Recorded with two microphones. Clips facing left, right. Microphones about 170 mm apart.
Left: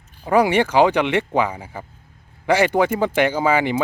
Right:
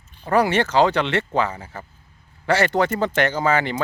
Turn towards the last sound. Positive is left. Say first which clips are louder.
# left 2 dB
turn(degrees=10)  # may be behind; listen again after turning